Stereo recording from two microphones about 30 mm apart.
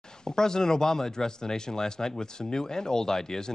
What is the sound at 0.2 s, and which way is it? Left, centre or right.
Speech, left.